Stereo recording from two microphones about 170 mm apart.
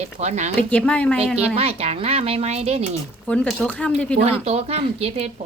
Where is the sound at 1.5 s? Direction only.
35° right (ahead or behind).